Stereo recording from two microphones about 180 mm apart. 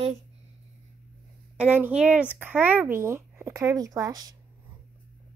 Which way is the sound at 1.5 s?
10° right (ahead or behind).